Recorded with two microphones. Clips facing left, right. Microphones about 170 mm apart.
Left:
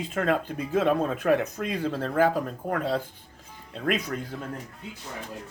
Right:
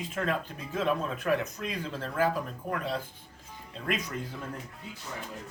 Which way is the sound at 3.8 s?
65° left (ahead or behind).